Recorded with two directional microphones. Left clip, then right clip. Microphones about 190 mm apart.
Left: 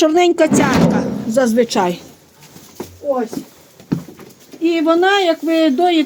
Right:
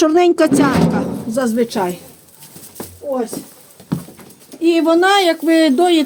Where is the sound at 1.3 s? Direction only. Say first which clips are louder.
Left 4 dB; 20° left (ahead or behind); by 2.0 s 40° left (ahead or behind).